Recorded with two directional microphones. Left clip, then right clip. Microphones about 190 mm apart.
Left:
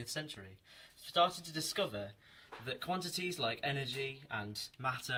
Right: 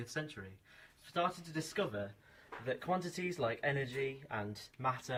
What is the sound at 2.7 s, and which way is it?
Speech, centre (ahead or behind).